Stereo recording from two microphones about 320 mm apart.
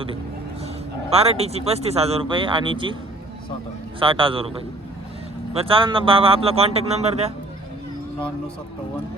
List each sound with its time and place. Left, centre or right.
1.1 s speech: centre
4.0 s speech: centre
5.5 s speech: centre